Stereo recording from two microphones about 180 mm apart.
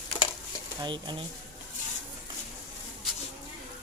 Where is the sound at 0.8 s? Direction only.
25° right (ahead or behind).